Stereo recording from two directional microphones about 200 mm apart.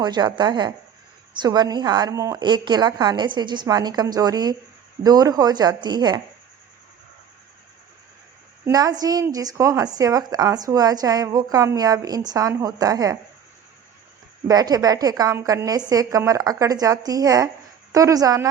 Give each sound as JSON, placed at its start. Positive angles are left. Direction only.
{"t": 0.0, "sound": "a woman's voice", "side_deg": -20}
{"t": 8.6, "sound": "a woman's voice", "side_deg": -20}
{"t": 14.4, "sound": "a woman's voice", "side_deg": -20}